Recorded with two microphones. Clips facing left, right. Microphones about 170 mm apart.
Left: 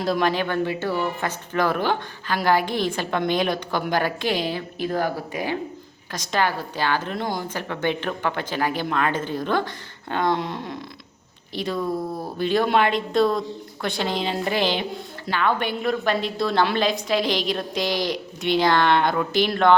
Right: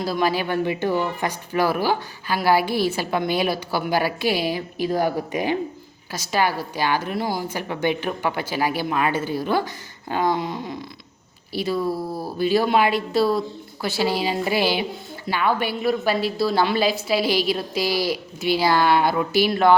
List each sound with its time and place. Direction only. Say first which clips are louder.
0.0 s a woman's voice: even; 5° right (ahead or behind)